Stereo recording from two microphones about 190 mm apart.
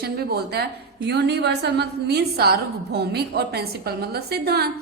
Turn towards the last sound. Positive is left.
turn(degrees=-55)  # may be behind; listen again after turning